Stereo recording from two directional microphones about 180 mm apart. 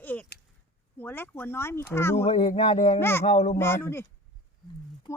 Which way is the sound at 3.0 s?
15° left (ahead or behind).